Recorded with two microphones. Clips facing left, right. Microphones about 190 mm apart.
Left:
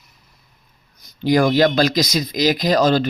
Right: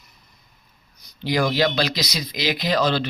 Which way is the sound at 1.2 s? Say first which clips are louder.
Left 6 dB; 50° left (ahead or behind).